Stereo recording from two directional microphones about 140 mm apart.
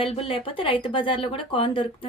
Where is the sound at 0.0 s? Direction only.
40° left (ahead or behind).